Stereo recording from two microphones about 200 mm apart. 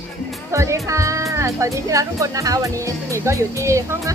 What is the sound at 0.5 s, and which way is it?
Speech, 15° right (ahead or behind).